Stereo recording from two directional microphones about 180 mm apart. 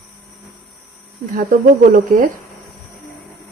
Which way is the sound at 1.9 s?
50° right (ahead or behind).